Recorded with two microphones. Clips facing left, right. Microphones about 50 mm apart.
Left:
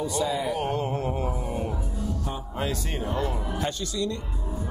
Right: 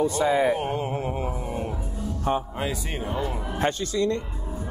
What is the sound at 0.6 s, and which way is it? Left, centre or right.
Music, centre.